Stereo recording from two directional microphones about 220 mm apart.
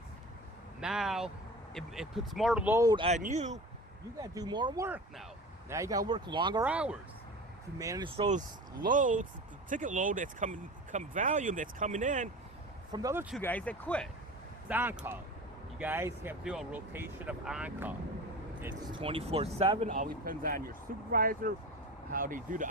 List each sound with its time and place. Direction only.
0.8 s speech: centre (ahead or behind); by 3.6 s 35° right (ahead or behind)
4.2 s speech: 15° right (ahead or behind)
6.7 s speech: 5° right (ahead or behind)
7.8 s speech: 15° right (ahead or behind); by 12.3 s 35° right (ahead or behind)
12.9 s speech: 15° right (ahead or behind)
13.3 s speech: 5° left (ahead or behind)
14.7 s speech: 10° right (ahead or behind)
18.9 s speech: 25° right (ahead or behind)
20.0 s speech: 40° right (ahead or behind)